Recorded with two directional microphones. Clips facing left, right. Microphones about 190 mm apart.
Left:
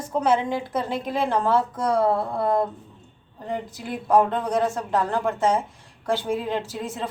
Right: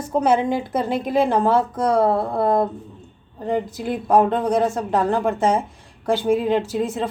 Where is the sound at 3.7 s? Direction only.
25° right (ahead or behind).